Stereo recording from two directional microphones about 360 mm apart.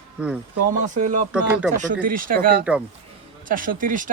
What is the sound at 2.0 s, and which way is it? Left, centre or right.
Speech, right.